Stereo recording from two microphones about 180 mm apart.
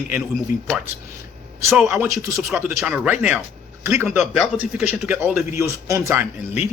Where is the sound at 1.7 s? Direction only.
5° right (ahead or behind).